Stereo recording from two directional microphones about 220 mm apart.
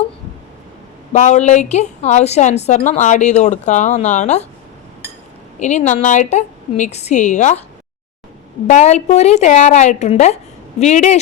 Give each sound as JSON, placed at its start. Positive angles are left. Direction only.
{"t": 1.1, "sound": "a woman's voice", "side_deg": 30}
{"t": 5.5, "sound": "a woman's voice", "side_deg": 30}
{"t": 8.6, "sound": "a woman's voice", "side_deg": 30}